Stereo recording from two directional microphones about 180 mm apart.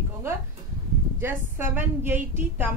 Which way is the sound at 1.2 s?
10° right (ahead or behind).